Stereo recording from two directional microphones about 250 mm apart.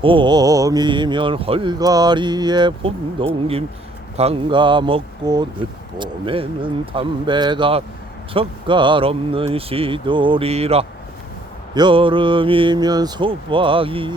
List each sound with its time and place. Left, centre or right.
0.0 s speech: centre